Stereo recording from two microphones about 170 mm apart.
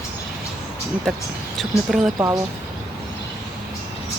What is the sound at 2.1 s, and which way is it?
Speech, 20° right (ahead or behind).